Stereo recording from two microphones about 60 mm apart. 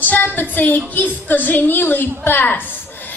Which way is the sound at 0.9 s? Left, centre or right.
Left.